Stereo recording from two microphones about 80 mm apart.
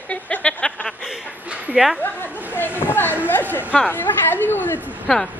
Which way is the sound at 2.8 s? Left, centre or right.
Left.